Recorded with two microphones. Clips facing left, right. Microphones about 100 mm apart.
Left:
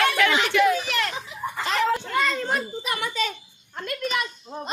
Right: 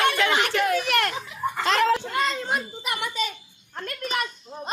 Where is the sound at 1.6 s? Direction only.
75° right (ahead or behind).